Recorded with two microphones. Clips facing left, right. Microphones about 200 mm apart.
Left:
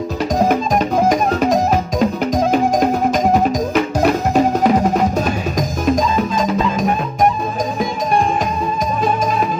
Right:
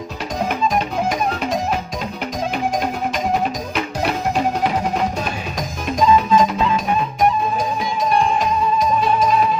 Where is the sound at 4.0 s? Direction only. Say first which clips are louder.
Left 4 dB; 45° left (ahead or behind).